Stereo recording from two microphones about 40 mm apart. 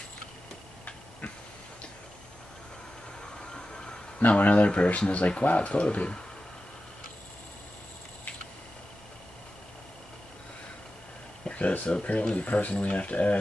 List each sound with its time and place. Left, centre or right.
3.2 s a sound: left
4.3 s speech: left
11.4 s speech: left